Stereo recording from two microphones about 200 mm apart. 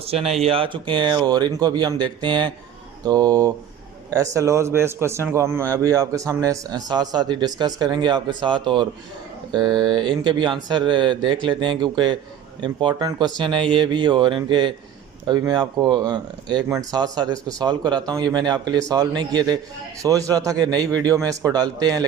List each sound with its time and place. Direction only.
0.1 s a man's voice: 30° right (ahead or behind)